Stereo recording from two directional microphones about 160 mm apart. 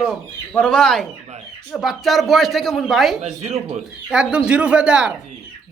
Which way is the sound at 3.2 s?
40° right (ahead or behind).